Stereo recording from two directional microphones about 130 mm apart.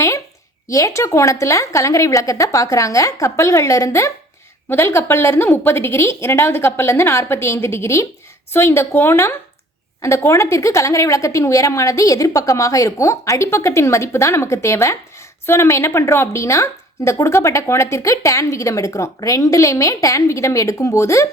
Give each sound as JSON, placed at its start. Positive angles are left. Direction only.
{"t": 0.7, "sound": "a woman's voice", "side_deg": 25}